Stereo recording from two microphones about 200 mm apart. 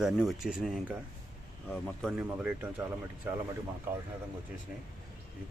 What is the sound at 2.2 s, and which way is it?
Speech, 5° right (ahead or behind).